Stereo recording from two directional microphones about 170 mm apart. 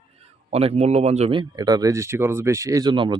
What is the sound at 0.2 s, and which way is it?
Speech, 35° right (ahead or behind).